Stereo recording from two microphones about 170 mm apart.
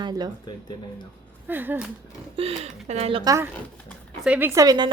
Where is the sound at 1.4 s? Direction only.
10° right (ahead or behind).